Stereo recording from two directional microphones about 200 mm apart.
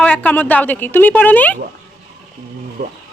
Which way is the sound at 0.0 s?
10° left (ahead or behind).